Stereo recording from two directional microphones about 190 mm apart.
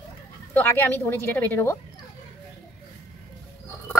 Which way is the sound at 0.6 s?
10° left (ahead or behind).